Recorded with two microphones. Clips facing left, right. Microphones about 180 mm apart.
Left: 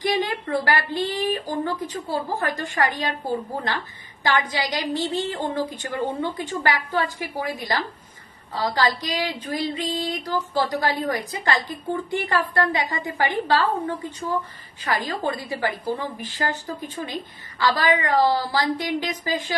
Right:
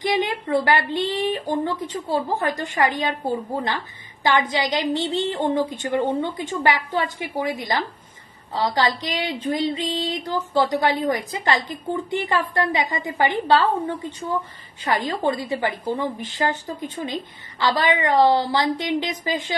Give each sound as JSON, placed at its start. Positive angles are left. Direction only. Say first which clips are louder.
{"t": 0.0, "sound": "speech", "louder": "right 1 dB", "side_deg": -20}
{"t": 15.0, "sound": "speech", "louder": "right 3 dB", "side_deg": -25}